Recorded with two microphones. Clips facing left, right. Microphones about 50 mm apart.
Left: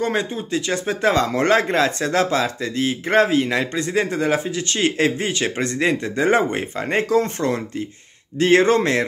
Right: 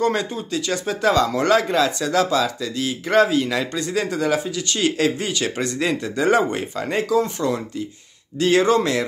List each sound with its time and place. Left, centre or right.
0.0 s a man's voice: left
7.0 s speech: left